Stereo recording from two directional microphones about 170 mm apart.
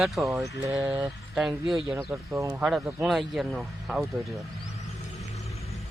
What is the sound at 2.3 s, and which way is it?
Speech, 15° right (ahead or behind).